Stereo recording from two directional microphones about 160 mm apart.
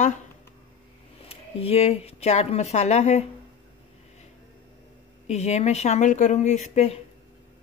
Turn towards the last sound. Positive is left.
turn(degrees=45)  # may be behind; listen again after turning